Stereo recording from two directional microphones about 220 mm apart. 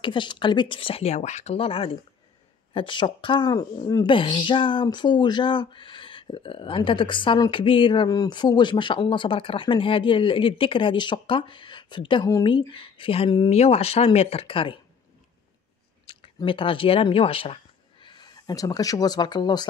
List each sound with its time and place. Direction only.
0.0 s speech: 20° left (ahead or behind)
16.1 s speech: 25° left (ahead or behind)